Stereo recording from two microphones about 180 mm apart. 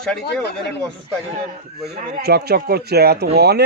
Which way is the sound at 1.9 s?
65° right (ahead or behind).